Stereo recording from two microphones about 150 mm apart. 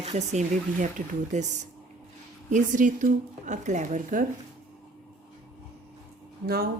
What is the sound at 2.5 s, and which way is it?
Speech, 60° right (ahead or behind).